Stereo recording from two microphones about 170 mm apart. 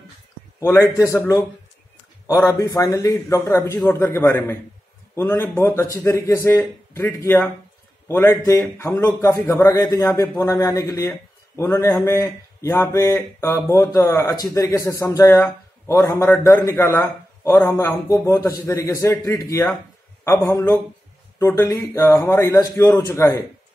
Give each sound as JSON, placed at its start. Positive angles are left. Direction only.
{"t": 0.6, "sound": "mantra", "side_deg": 15}
{"t": 2.6, "sound": "mantra", "side_deg": 20}